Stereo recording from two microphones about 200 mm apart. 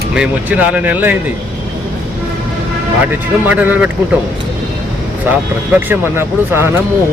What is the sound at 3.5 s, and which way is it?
Speech, 10° right (ahead or behind).